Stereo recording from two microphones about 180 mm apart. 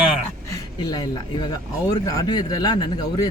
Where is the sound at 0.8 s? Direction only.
20° left (ahead or behind).